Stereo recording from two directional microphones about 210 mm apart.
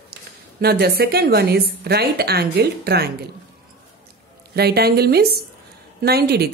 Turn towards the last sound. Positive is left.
turn(degrees=-50)  # may be behind; listen again after turning